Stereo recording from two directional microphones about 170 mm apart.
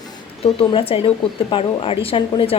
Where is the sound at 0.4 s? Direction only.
35° left (ahead or behind).